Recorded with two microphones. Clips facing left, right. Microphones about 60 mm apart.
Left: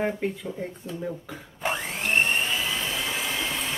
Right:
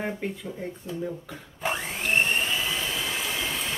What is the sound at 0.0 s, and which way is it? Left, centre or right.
Speech, centre.